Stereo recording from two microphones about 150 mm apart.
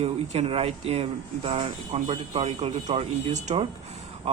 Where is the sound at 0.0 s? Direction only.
40° right (ahead or behind).